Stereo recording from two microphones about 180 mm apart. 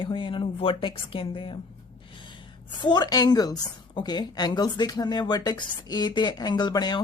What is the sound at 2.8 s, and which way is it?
A woman's voice, 25° left (ahead or behind).